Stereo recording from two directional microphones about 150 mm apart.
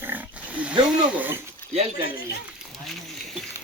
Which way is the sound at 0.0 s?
10° right (ahead or behind).